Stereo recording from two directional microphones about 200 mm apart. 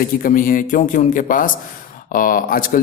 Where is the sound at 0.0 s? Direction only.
45° left (ahead or behind).